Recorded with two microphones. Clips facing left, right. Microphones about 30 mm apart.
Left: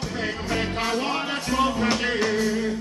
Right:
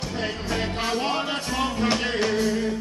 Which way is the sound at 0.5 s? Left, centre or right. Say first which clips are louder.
Left 1 dB; centre.